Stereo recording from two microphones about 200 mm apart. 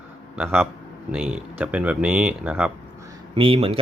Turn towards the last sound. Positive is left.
turn(degrees=-30)  # may be behind; listen again after turning